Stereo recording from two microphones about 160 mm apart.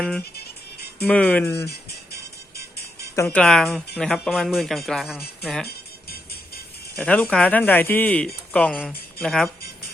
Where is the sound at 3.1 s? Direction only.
15° left (ahead or behind).